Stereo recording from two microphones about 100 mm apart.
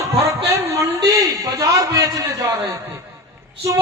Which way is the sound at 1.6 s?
35° right (ahead or behind).